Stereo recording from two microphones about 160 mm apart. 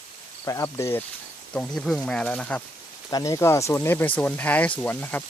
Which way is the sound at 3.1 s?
25° left (ahead or behind).